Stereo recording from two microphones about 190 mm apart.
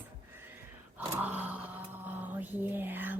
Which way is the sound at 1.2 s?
10° right (ahead or behind).